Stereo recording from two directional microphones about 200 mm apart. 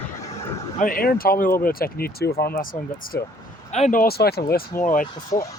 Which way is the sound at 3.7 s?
35° left (ahead or behind).